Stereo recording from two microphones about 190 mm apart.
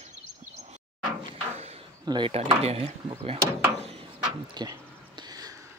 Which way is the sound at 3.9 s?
30° right (ahead or behind).